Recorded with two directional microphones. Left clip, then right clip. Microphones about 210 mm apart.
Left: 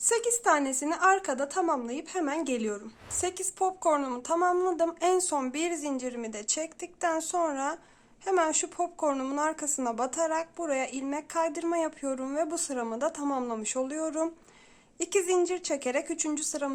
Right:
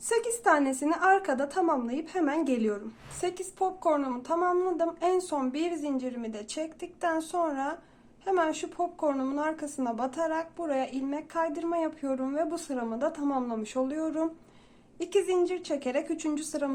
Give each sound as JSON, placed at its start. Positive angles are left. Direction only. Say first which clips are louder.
{"t": 0.1, "sound": "a woman's voice", "louder": "right 1 dB", "side_deg": 20}